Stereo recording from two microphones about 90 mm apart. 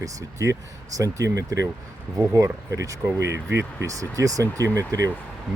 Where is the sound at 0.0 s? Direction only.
35° right (ahead or behind).